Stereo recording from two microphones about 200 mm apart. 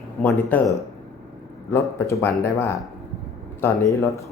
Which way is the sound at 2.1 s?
15° left (ahead or behind).